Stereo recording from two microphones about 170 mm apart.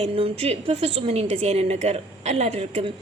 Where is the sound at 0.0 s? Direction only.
35° right (ahead or behind).